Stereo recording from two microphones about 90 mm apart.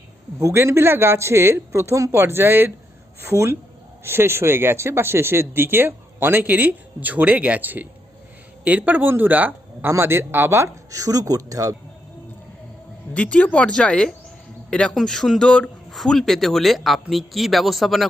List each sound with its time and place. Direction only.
0.3 s speech: 30° right (ahead or behind)
13.1 s speech: 15° left (ahead or behind)